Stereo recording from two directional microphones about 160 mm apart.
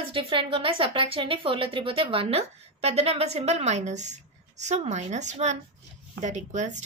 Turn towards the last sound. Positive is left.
turn(degrees=-50)  # may be behind; listen again after turning